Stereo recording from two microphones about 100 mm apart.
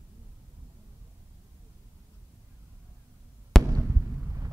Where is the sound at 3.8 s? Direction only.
20° right (ahead or behind).